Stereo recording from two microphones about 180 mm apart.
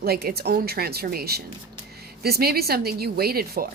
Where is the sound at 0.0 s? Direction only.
60° right (ahead or behind).